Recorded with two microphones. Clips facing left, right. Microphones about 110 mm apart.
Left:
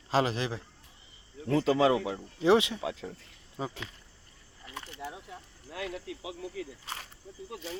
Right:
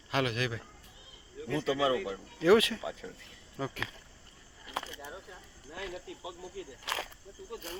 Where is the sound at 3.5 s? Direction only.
20° left (ahead or behind).